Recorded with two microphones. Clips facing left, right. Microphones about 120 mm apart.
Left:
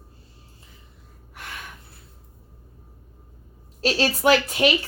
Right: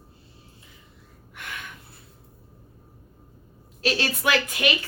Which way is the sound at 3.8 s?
35° left (ahead or behind).